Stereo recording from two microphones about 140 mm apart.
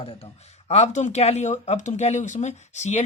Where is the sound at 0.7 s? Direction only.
55° left (ahead or behind).